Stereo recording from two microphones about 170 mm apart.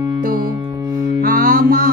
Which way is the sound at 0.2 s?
55° right (ahead or behind).